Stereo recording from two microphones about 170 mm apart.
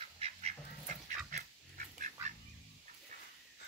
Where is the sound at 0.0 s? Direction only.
35° right (ahead or behind).